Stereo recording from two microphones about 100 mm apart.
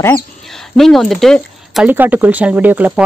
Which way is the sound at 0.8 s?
5° left (ahead or behind).